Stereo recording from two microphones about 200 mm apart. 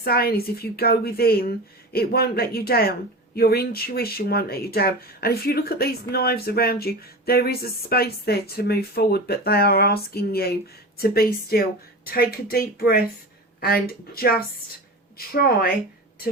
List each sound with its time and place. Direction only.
0.0 s speech: 50° left (ahead or behind)